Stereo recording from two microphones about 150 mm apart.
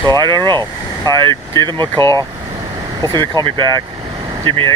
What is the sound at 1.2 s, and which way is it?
Speech, 20° left (ahead or behind).